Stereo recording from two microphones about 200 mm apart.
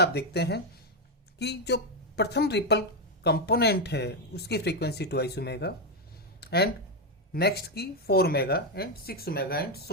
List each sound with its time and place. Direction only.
0.0 s speech: 55° left (ahead or behind)
6.4 s a sound: 55° left (ahead or behind)
7.3 s speech: 55° left (ahead or behind)